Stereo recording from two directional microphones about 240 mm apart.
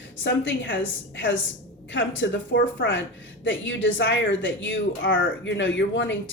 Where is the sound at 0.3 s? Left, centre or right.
Left.